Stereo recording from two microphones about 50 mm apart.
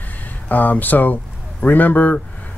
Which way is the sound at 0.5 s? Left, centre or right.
Left.